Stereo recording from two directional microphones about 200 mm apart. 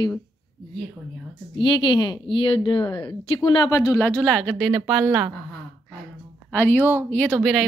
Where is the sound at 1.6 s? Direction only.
20° left (ahead or behind); by 5.1 s 5° right (ahead or behind).